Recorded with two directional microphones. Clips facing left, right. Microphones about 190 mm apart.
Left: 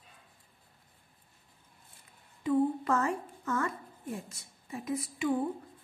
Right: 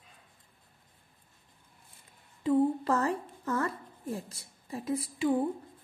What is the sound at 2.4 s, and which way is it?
A woman's voice, 30° right (ahead or behind).